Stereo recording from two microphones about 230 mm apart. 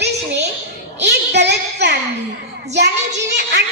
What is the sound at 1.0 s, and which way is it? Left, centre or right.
Child singing, right.